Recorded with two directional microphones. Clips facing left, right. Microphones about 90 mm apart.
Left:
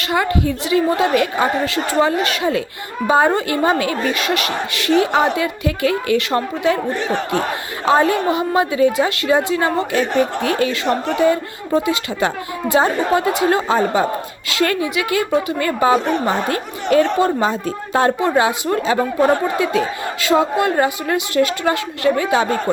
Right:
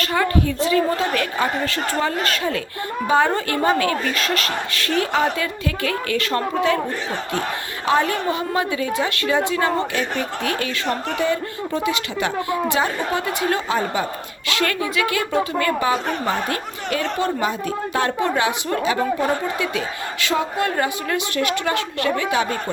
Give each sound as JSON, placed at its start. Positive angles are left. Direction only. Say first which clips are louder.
{"t": 0.0, "sound": "a woman's voice", "louder": "left 2 dB", "side_deg": 20}
{"t": 3.1, "sound": "speech", "louder": "left 4 dB", "side_deg": 25}
{"t": 7.9, "sound": "speech", "louder": "left 5 dB", "side_deg": 25}
{"t": 20.2, "sound": "speech", "louder": "left 6 dB", "side_deg": 25}